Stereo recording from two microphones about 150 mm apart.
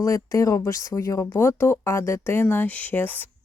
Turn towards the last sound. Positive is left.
turn(degrees=15)  # may be behind; listen again after turning